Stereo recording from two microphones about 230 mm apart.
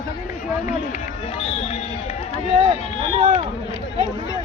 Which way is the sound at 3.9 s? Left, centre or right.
Centre.